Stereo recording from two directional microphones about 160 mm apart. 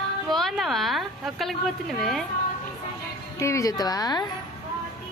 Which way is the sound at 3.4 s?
20° left (ahead or behind).